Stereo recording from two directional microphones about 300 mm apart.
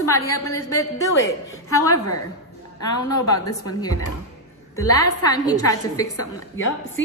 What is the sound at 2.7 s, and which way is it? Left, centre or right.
Speech, left.